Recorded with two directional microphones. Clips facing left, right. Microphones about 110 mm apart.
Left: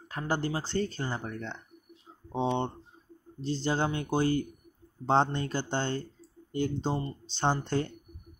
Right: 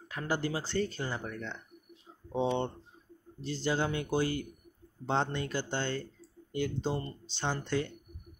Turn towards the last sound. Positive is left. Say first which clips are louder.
# left 4 dB
turn(degrees=35)  # may be behind; listen again after turning